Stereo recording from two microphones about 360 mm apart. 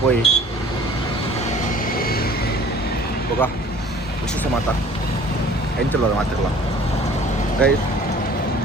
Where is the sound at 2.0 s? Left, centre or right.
Left.